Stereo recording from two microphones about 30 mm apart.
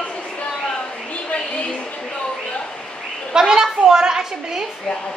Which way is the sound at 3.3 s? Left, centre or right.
Centre.